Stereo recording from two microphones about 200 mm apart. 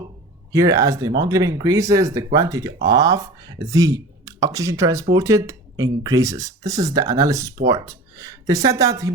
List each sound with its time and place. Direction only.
0.5 s speech: 15° right (ahead or behind)